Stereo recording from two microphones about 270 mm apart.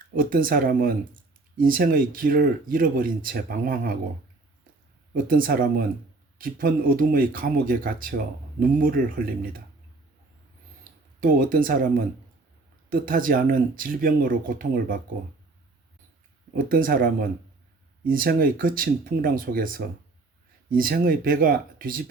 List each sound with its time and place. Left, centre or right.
0.1 s speech: right
5.1 s speech: right
11.2 s speech: right
16.6 s speech: right